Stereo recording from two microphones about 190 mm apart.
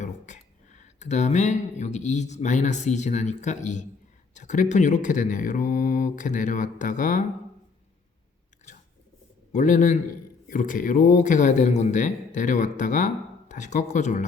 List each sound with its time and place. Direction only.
0.0 s speech: 40° left (ahead or behind)
8.7 s chewing: 40° left (ahead or behind)
9.5 s speech: 40° left (ahead or behind)